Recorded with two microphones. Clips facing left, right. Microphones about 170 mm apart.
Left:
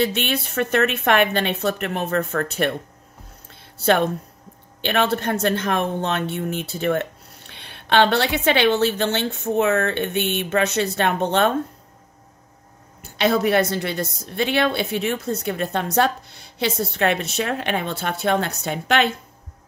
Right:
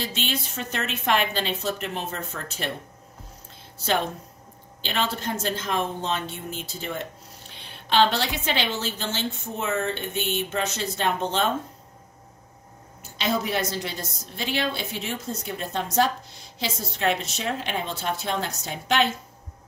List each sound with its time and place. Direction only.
0.0 s speech: 60° left (ahead or behind)
3.7 s speech: 60° left (ahead or behind)
13.2 s speech: 65° left (ahead or behind)